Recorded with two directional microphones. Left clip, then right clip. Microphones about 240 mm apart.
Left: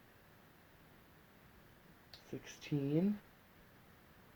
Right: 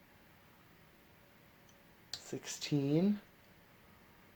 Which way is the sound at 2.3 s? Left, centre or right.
Right.